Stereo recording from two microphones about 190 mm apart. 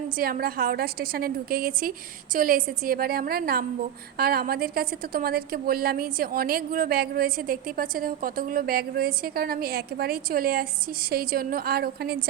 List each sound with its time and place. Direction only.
0.2 s a woman's voice: 50° right (ahead or behind)